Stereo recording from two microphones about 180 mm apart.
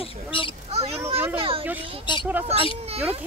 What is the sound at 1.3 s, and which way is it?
Speech, 30° right (ahead or behind).